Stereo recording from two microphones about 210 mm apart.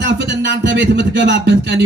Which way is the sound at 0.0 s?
60° right (ahead or behind).